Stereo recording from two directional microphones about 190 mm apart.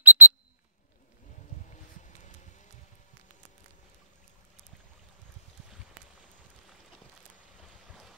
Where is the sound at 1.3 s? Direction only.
40° left (ahead or behind).